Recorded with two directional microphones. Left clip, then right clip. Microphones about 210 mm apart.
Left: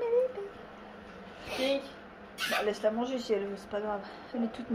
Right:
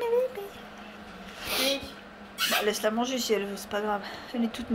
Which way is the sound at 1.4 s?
Centre (ahead or behind).